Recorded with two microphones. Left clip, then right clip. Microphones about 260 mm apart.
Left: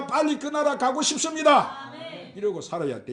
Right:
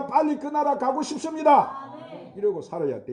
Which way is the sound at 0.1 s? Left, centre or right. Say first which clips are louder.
Right 1 dB; left.